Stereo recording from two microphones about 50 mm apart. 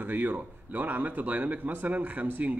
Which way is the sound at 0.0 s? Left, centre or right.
Right.